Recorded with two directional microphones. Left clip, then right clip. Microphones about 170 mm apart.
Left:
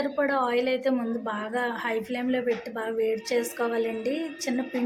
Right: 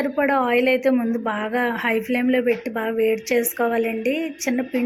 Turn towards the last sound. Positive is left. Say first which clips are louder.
# right 6 dB
turn(degrees=-20)  # may be behind; listen again after turning